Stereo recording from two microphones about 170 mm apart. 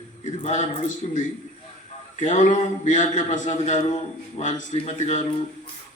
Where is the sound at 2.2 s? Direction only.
45° left (ahead or behind).